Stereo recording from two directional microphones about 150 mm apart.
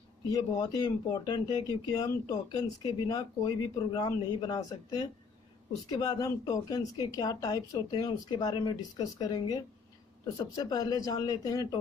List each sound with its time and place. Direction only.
0.3 s speech: 25° left (ahead or behind)